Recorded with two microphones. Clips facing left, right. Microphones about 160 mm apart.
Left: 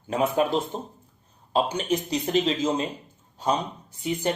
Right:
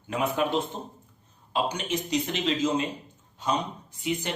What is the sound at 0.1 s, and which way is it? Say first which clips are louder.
Speech: left 3 dB; 35° left (ahead or behind).